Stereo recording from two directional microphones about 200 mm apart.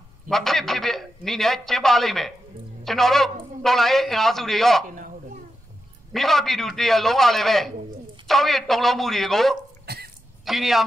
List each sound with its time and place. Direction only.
0.3 s a man's voice: centre (ahead or behind)
4.8 s a sound: 40° right (ahead or behind)
6.1 s a man's voice: centre (ahead or behind)
9.8 s cough: 50° right (ahead or behind)
10.4 s a man's voice: centre (ahead or behind)